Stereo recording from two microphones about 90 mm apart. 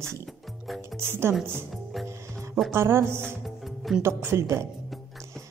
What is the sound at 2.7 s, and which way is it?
Speech, 30° right (ahead or behind).